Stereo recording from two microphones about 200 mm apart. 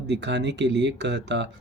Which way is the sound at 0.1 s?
60° right (ahead or behind).